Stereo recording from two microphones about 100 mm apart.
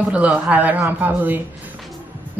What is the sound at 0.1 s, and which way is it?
Speech, 15° right (ahead or behind).